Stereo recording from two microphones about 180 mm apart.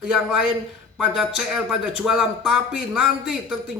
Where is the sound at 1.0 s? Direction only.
5° right (ahead or behind).